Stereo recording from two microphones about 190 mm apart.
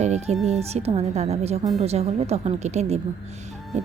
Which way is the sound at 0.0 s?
35° right (ahead or behind).